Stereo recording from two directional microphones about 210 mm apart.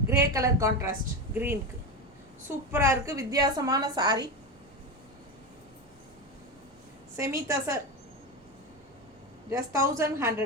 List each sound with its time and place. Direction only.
0.1 s a woman's voice: 15° right (ahead or behind)
2.7 s a woman's voice: 15° right (ahead or behind)
7.2 s a woman's voice: 15° right (ahead or behind)
9.5 s a woman's voice: 15° right (ahead or behind)